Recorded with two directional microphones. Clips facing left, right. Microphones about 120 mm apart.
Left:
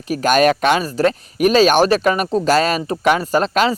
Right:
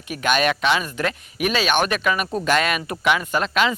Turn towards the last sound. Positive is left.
turn(degrees=40)  # may be behind; listen again after turning